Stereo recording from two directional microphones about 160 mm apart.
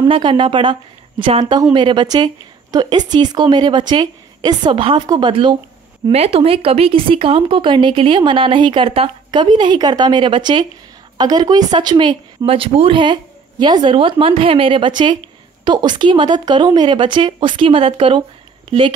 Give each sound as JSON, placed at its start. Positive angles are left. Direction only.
{"t": 0.0, "sound": "speech", "side_deg": -30}